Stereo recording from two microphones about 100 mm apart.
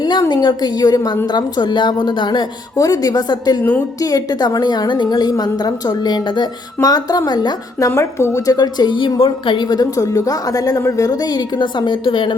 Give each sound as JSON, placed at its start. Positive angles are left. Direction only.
{"t": 0.0, "sound": "a woman's voice", "side_deg": 45}
{"t": 7.9, "sound": "speech", "side_deg": 30}
{"t": 8.4, "sound": "a woman's voice", "side_deg": 40}
{"t": 9.6, "sound": "a woman's voice", "side_deg": 40}